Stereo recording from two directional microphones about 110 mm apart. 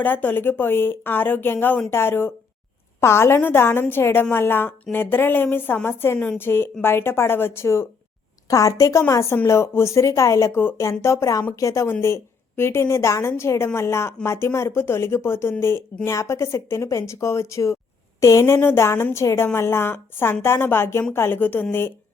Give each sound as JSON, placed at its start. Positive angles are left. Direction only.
{"t": 0.0, "sound": "a woman's voice", "side_deg": 15}
{"t": 6.1, "sound": "speech", "side_deg": 10}
{"t": 6.4, "sound": "a woman's voice", "side_deg": 20}